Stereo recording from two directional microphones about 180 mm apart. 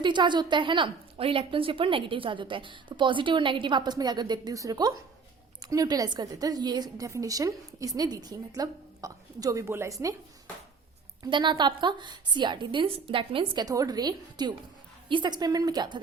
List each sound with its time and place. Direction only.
0.0 s a woman's voice: 25° right (ahead or behind)
11.2 s a woman's voice: 25° right (ahead or behind)